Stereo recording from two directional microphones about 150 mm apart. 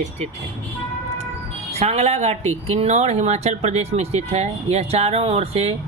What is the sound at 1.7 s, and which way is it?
Speech, 45° right (ahead or behind).